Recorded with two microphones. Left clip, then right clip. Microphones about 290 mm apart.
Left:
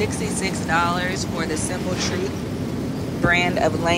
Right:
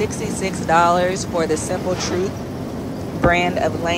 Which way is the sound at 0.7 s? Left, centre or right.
Centre.